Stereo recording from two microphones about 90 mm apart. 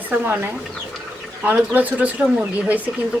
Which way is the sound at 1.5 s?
20° right (ahead or behind).